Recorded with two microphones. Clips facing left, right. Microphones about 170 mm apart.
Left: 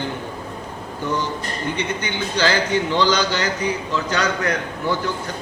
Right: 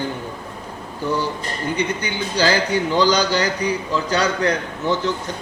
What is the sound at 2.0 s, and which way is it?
A man's voice, 40° right (ahead or behind).